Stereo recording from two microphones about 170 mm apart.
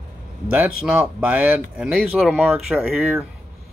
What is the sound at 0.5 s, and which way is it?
Speech, 5° right (ahead or behind).